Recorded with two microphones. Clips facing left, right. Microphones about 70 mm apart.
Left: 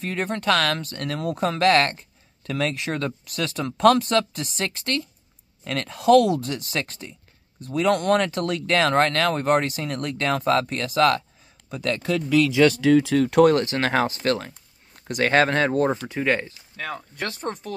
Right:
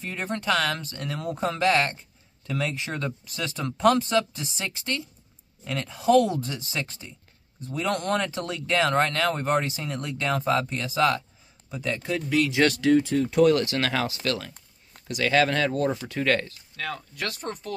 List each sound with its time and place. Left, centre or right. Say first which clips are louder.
0.0 s speech: left 5 dB; left
11.7 s speech: left 4 dB; left
13.0 s speech: left 4 dB; left
13.5 s speech: left 2 dB; left
16.1 s speech: left 1 dB; centre